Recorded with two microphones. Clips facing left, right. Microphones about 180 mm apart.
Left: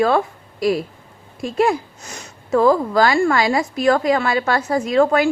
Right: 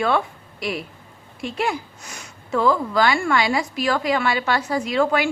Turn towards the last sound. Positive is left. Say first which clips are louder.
# left 4 dB
turn(degrees=45)  # may be behind; listen again after turning